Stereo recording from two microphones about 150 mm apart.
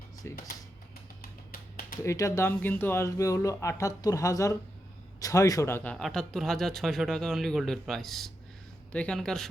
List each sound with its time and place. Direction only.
0.2 s speech: 20° left (ahead or behind)
2.0 s speech: 20° left (ahead or behind); by 9.5 s 5° left (ahead or behind)